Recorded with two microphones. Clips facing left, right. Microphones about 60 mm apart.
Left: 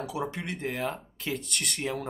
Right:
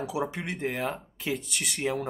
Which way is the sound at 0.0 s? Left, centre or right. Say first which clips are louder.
Right 2 dB; centre.